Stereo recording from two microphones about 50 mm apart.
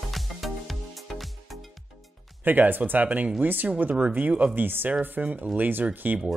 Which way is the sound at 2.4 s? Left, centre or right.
Right.